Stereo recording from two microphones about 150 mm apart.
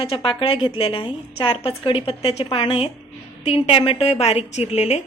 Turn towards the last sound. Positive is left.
turn(degrees=50)  # may be behind; listen again after turning